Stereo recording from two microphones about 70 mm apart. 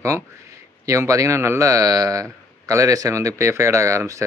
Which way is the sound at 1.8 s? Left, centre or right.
Right.